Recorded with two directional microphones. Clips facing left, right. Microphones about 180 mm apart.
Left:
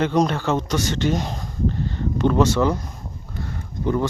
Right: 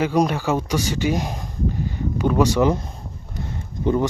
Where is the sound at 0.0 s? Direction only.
10° right (ahead or behind).